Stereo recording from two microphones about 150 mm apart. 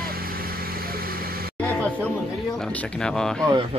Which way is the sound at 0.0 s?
85° right.